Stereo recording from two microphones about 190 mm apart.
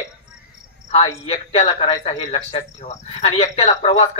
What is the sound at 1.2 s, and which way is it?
A man's voice, 30° left (ahead or behind).